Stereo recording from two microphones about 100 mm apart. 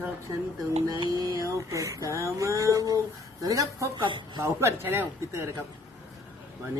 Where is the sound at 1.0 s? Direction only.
40° right (ahead or behind).